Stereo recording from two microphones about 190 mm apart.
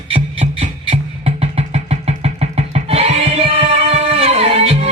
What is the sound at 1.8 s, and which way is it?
Music, 35° right (ahead or behind).